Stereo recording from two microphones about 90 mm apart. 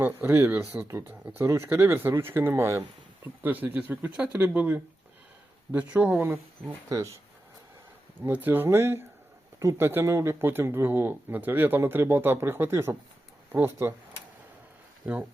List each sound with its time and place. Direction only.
0.0 s speech: 20° right (ahead or behind)
0.9 s speech: 30° right (ahead or behind)
3.4 s speech: 20° right (ahead or behind)
6.8 s speech: 35° right (ahead or behind)
8.2 s speech: 20° right (ahead or behind)
15.1 s speech: 15° right (ahead or behind)